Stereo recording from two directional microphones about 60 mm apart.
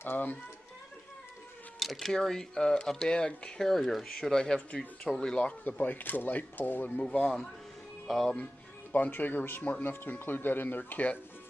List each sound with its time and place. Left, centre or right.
0.0 s speech: left
1.8 s speech: centre
3.8 s speech: centre
4.1 s speech: centre
5.5 s speech: left
7.0 s speech: centre
8.0 s speech: centre
8.9 s speech: left